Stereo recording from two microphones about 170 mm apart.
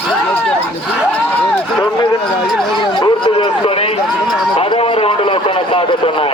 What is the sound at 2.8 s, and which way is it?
Chatter, 30° left (ahead or behind).